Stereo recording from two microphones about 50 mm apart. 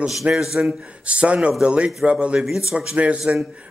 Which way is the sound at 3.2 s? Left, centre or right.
Centre.